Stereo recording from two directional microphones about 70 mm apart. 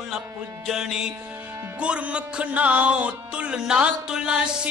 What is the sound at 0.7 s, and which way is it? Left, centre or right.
Music, centre.